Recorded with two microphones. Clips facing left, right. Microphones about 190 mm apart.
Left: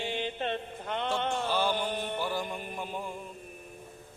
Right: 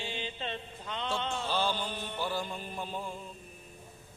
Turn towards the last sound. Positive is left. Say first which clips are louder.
# left 1 dB
turn(degrees=15)  # may be behind; listen again after turning